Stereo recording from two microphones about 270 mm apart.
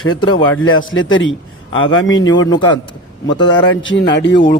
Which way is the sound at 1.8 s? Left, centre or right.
Centre.